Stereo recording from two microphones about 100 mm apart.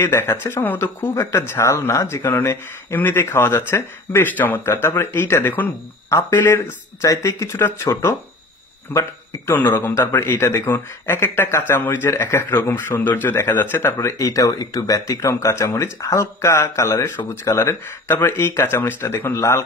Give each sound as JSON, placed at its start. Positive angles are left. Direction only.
{"t": 0.0, "sound": "a man's voice", "side_deg": 25}
{"t": 9.5, "sound": "a man's voice", "side_deg": 25}